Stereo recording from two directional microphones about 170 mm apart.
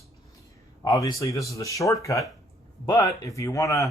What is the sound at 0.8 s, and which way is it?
Speech, 20° left (ahead or behind).